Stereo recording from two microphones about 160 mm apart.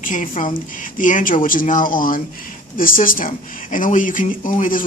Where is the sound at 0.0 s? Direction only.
55° left (ahead or behind).